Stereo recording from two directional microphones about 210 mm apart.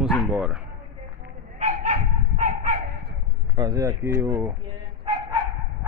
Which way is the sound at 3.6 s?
15° right (ahead or behind).